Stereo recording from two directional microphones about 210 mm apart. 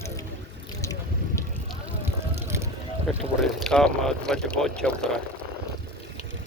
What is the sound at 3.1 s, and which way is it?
Speech, centre (ahead or behind).